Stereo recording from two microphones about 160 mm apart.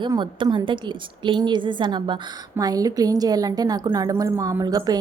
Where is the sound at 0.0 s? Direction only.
30° right (ahead or behind).